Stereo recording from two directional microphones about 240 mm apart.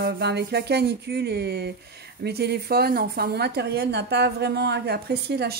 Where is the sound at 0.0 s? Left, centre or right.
Right.